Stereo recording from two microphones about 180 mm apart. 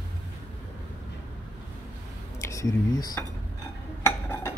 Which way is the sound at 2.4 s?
20° left (ahead or behind).